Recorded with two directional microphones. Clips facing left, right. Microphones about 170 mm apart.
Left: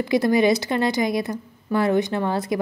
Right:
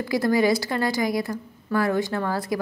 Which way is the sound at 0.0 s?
20° left (ahead or behind).